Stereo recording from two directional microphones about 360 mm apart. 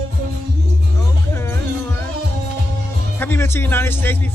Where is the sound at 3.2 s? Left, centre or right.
Centre.